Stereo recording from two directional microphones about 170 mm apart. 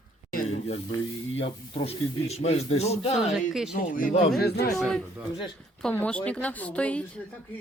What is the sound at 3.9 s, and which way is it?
Speech, 55° left (ahead or behind).